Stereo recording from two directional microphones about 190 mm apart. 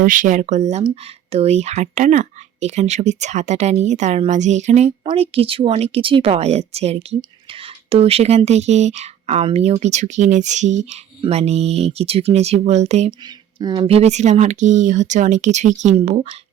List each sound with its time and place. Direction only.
0.0 s speech: 45° right (ahead or behind)
13.6 s speech: 25° right (ahead or behind)